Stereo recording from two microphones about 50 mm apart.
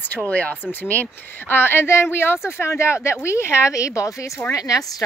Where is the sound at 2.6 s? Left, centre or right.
Left.